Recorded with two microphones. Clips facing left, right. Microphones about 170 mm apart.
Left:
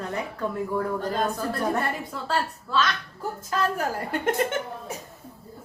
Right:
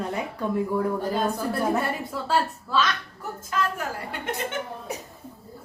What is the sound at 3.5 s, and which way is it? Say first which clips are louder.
Speech: left 2 dB; 40° left (ahead or behind).